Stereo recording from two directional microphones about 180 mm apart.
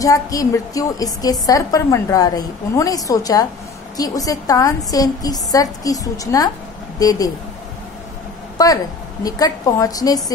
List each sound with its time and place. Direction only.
0.0 s a woman's voice: 20° left (ahead or behind)
8.6 s a woman's voice: 20° left (ahead or behind)